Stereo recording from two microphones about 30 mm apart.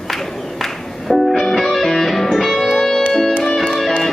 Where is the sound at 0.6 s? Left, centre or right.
Centre.